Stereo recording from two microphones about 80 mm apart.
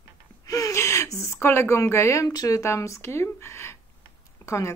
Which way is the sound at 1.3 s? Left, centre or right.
Left.